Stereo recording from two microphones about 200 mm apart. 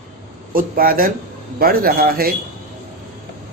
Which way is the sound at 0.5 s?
45° right (ahead or behind).